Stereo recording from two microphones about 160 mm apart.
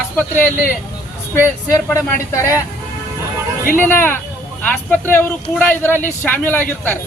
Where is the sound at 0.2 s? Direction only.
10° left (ahead or behind).